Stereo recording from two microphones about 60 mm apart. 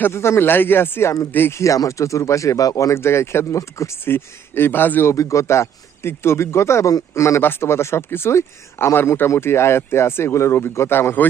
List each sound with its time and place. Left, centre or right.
0.0 s speech: left
1.5 s speech: left
2.9 s speech: left
4.0 s speech: left
5.0 s speech: left
7.4 s speech: left